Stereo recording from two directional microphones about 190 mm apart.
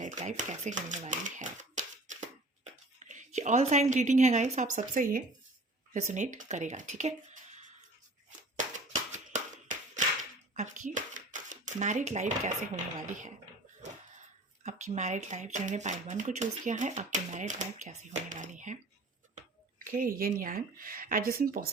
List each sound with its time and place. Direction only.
0.0 s a woman's voice: 40° right (ahead or behind)
8.5 s a sound: 40° right (ahead or behind)
14.6 s speech: 40° right (ahead or behind)
19.8 s speech: 45° right (ahead or behind)